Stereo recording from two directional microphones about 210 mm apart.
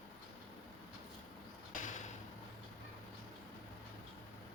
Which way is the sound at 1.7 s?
35° left (ahead or behind).